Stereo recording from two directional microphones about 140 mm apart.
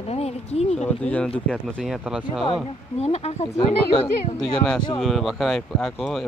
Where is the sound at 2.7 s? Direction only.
45° left (ahead or behind).